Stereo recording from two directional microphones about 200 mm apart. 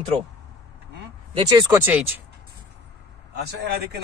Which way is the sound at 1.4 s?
20° right (ahead or behind).